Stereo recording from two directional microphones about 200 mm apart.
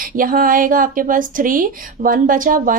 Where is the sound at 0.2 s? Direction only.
45° right (ahead or behind).